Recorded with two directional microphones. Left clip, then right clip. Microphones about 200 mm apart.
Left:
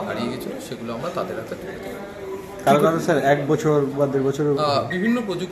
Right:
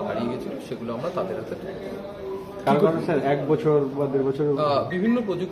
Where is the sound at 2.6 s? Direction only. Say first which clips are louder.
Left 4 dB; 50° left (ahead or behind).